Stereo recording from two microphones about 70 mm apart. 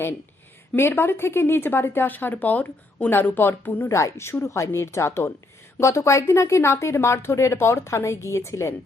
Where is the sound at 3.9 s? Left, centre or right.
Left.